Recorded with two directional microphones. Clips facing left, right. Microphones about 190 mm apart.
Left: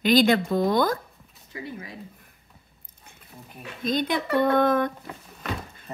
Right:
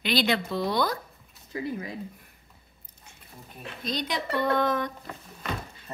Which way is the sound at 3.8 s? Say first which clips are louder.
Left 6 dB; 50° left (ahead or behind).